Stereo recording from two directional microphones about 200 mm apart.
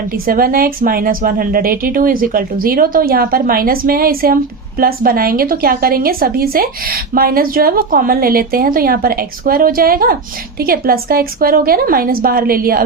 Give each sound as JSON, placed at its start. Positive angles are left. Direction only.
{"t": 0.1, "sound": "a woman's voice", "side_deg": -45}